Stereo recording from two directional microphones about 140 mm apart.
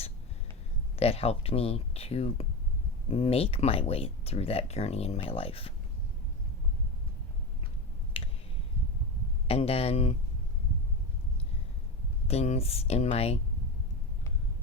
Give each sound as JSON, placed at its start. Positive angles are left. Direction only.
{"t": 0.9, "sound": "speech", "side_deg": 45}
{"t": 8.1, "sound": "a sound", "side_deg": 40}
{"t": 9.5, "sound": "speech", "side_deg": 45}
{"t": 12.3, "sound": "speech", "side_deg": 50}